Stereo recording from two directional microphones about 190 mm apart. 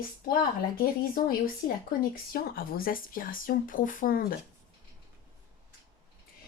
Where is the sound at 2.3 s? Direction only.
50° left (ahead or behind).